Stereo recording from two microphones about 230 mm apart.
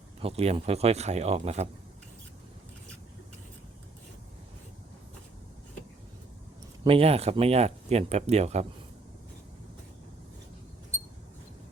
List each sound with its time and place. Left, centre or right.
0.2 s speech: right
6.8 s speech: right